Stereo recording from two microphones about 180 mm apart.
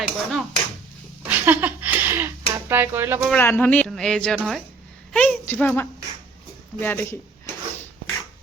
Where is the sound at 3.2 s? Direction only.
10° left (ahead or behind).